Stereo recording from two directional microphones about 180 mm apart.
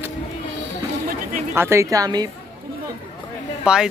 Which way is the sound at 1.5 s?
15° right (ahead or behind).